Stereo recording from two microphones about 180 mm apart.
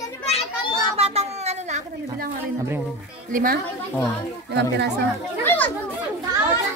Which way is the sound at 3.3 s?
50° right (ahead or behind).